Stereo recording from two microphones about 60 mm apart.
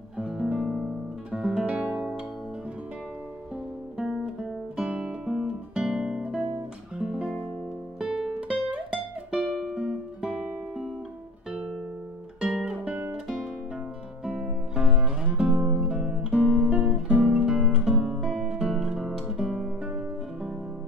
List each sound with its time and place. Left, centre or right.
0.2 s guitar: centre
1.3 s music: centre
4.7 s guitar: right
7.0 s music: centre
12.4 s music: centre
12.7 s guitar: right
13.1 s guitar: centre
14.2 s music: centre
16.5 s guitar: centre
16.9 s guitar: right
17.6 s guitar: centre